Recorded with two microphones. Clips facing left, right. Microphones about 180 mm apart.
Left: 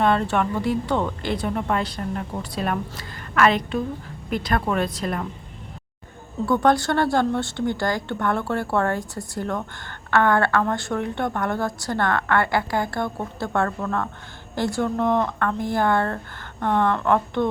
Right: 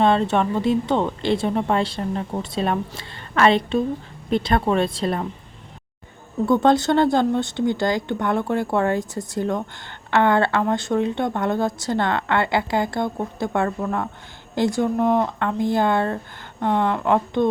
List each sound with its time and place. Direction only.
0.0 s speech: 20° right (ahead or behind)
6.4 s speech: 20° right (ahead or behind)